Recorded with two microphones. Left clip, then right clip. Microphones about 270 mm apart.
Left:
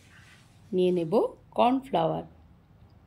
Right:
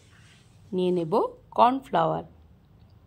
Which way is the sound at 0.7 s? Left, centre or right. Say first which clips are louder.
Even; centre.